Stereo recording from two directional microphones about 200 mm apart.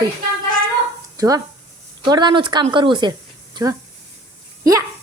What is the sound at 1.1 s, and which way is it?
A woman's voice, 20° right (ahead or behind).